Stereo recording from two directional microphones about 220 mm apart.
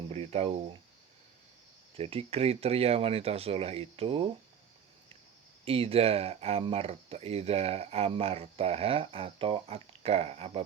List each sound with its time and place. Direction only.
0.1 s speech: 30° right (ahead or behind)
2.0 s speech: 25° right (ahead or behind)
5.6 s speech: 25° right (ahead or behind)